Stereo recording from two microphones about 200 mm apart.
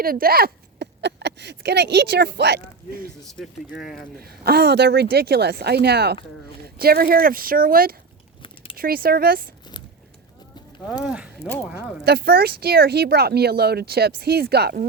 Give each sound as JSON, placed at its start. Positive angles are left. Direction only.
{"t": 0.0, "sound": "speech", "side_deg": -45}
{"t": 3.2, "sound": "speech", "side_deg": 0}
{"t": 4.2, "sound": "speech", "side_deg": -50}
{"t": 11.0, "sound": "speech", "side_deg": -5}
{"t": 12.0, "sound": "speech", "side_deg": -50}